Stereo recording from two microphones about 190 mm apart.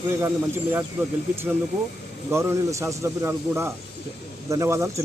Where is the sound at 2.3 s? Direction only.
15° right (ahead or behind).